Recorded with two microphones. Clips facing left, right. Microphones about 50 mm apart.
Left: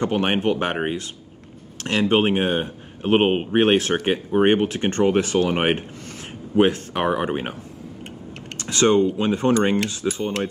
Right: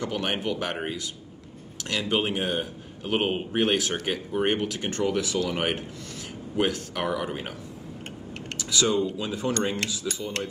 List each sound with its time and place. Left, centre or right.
0.0 s speech: left
8.5 s speech: left